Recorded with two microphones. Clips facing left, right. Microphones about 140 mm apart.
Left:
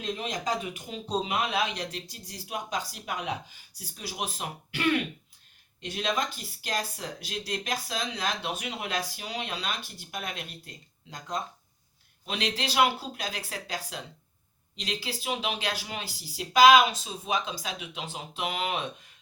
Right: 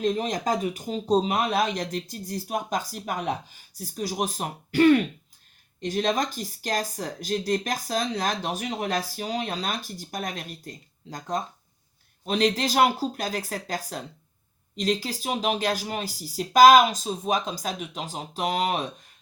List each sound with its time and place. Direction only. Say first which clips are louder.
0.0 s speech: right 7 dB; 40° right (ahead or behind)